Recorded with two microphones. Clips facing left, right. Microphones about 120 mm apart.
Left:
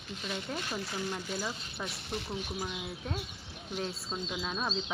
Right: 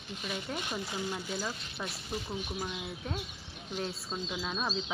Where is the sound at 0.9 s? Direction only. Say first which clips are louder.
Even; 15° right (ahead or behind).